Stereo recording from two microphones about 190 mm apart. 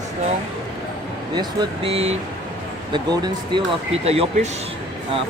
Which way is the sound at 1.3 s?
25° right (ahead or behind).